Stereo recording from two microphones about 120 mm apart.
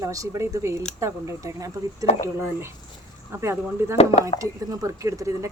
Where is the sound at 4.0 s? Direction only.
55° left (ahead or behind).